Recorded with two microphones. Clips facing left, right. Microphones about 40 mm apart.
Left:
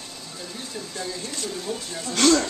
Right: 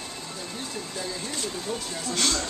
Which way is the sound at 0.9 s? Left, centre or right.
Centre.